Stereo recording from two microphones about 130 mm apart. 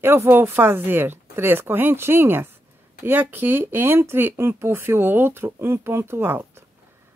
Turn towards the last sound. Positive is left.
turn(degrees=-15)  # may be behind; listen again after turning